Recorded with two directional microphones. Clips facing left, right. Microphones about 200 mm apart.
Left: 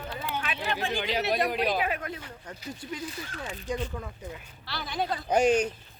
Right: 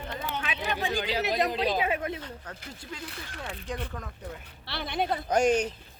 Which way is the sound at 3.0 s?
60° right (ahead or behind).